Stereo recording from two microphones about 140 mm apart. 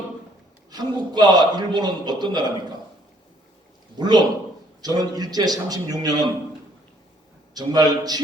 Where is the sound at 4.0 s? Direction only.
30° right (ahead or behind).